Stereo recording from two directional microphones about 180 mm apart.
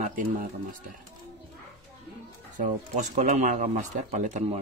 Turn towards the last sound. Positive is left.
turn(degrees=-40)  # may be behind; listen again after turning